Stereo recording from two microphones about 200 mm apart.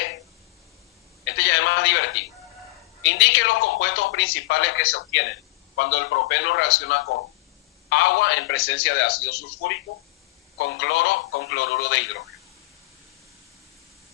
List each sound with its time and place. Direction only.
1.2 s telephone: 70° left (ahead or behind)
3.0 s a sound: 70° left (ahead or behind)
5.7 s a man's voice: 65° left (ahead or behind)
8.7 s speech: 65° left (ahead or behind)
10.6 s speech: 60° left (ahead or behind)